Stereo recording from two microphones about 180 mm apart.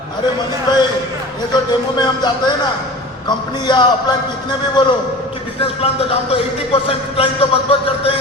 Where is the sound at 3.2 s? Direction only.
25° left (ahead or behind).